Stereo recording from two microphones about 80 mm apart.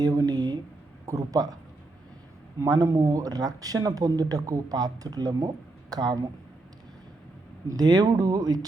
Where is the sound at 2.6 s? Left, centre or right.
Right.